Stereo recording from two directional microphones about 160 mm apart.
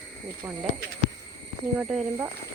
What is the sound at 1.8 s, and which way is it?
Speech, centre (ahead or behind).